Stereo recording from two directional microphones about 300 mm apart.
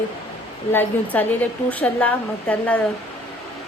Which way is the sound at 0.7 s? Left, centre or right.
Centre.